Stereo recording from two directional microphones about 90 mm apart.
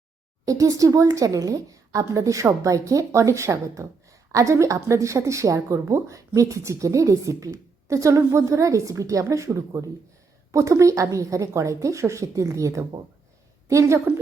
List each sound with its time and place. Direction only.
0.4 s a woman's voice: 40° right (ahead or behind)